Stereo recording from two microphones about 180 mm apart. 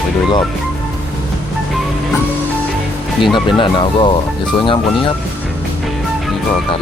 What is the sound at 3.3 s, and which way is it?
Speech, 25° left (ahead or behind).